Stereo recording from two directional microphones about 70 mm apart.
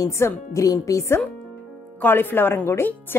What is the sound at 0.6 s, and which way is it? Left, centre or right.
Speech, left.